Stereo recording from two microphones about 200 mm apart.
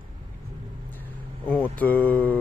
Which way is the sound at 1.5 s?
5° left (ahead or behind).